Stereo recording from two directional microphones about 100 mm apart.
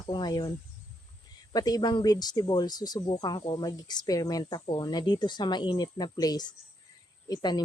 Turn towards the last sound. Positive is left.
turn(degrees=40)  # may be behind; listen again after turning